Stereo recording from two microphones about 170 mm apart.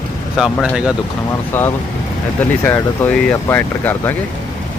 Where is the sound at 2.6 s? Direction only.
10° left (ahead or behind).